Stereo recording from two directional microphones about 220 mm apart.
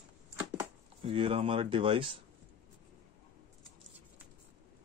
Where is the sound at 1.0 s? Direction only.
25° right (ahead or behind).